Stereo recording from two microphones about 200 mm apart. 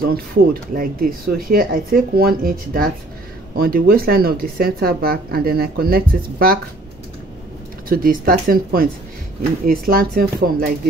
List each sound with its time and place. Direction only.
0.0 s speech: 50° right (ahead or behind)
7.9 s speech: 45° right (ahead or behind)